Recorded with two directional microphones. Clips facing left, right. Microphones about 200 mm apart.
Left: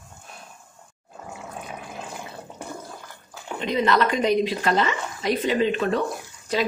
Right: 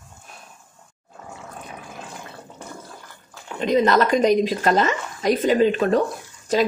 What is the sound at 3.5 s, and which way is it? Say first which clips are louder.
Speech: right 4 dB; 45° right (ahead or behind).